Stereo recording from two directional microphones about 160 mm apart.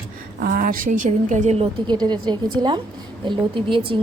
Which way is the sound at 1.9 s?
25° right (ahead or behind).